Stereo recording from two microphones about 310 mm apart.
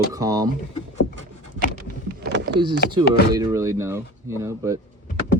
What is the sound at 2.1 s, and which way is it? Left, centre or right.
Vehicle, right.